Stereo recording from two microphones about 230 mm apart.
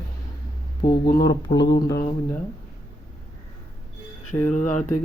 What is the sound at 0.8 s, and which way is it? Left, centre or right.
Speech, left.